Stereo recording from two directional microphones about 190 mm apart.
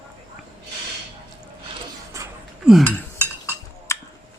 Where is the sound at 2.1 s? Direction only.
15° right (ahead or behind).